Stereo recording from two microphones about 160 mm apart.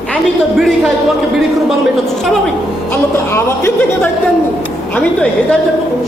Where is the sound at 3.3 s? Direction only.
15° left (ahead or behind).